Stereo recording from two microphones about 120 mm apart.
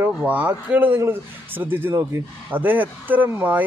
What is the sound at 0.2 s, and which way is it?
A man's voice, 10° right (ahead or behind).